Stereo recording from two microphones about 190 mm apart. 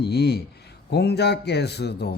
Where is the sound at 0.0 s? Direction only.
55° left (ahead or behind).